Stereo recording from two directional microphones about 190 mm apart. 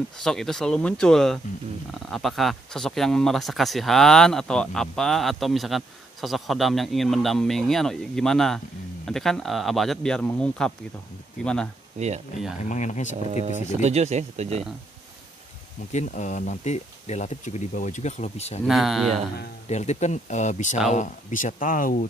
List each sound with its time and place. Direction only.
0.2 s speech: centre (ahead or behind)
12.0 s speech: 35° right (ahead or behind)
12.5 s speech: 40° left (ahead or behind)
13.8 s speech: 35° right (ahead or behind)
15.9 s speech: 40° left (ahead or behind)
18.7 s speech: centre (ahead or behind)
19.7 s speech: 35° left (ahead or behind)